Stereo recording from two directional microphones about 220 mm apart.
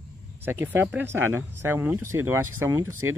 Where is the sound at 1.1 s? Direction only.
65° right (ahead or behind).